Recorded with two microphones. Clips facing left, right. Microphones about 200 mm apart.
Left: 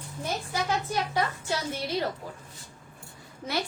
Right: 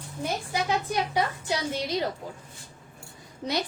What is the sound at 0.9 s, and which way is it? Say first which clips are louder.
Speech: right 2 dB; 15° right (ahead or behind).